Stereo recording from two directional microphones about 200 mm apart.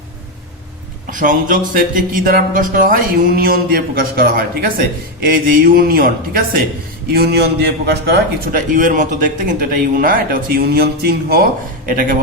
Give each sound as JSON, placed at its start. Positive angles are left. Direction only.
{"t": 1.1, "sound": "a man's voice", "side_deg": -40}